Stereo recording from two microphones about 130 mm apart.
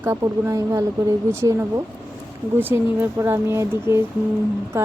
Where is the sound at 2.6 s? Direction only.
15° right (ahead or behind).